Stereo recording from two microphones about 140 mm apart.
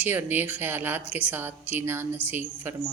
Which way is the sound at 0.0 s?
15° right (ahead or behind).